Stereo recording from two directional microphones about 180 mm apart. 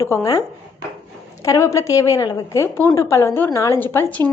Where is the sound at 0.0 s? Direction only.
15° left (ahead or behind).